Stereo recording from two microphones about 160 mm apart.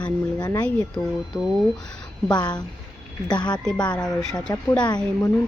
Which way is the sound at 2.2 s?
25° left (ahead or behind).